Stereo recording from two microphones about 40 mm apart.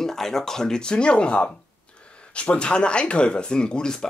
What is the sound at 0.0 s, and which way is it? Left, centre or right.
Speech, centre.